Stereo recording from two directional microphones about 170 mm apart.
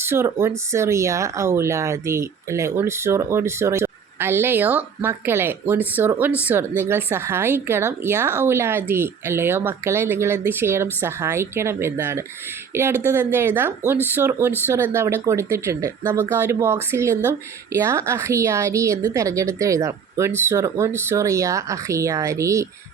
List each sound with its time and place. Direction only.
0.0 s speech: 15° right (ahead or behind)